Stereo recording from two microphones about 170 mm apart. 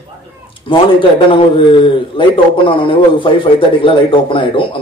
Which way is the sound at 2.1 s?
30° left (ahead or behind).